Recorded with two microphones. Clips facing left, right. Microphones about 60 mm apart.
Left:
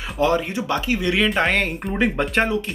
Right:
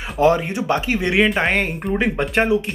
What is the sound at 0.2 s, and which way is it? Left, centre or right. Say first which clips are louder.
Speech: right 4 dB; right.